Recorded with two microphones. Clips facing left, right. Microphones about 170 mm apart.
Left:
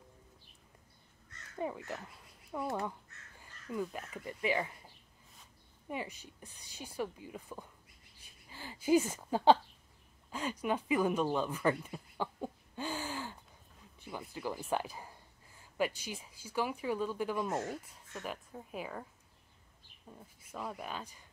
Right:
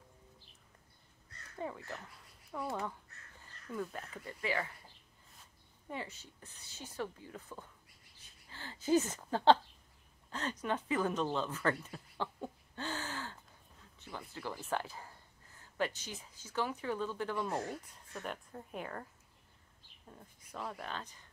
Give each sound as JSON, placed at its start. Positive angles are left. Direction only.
{"t": 1.6, "sound": "speech", "side_deg": 15}
{"t": 2.6, "sound": "speech", "side_deg": 5}
{"t": 5.9, "sound": "speech", "side_deg": 15}
{"t": 20.1, "sound": "speech", "side_deg": 5}